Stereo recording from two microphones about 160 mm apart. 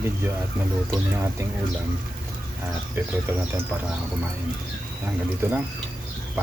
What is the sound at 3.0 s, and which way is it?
Speech, 15° right (ahead or behind).